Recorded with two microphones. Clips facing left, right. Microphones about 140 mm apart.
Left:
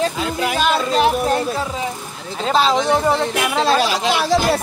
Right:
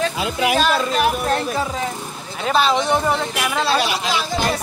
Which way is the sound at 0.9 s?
25° left (ahead or behind).